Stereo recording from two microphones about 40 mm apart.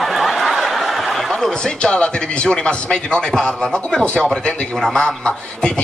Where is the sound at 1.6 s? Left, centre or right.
Left.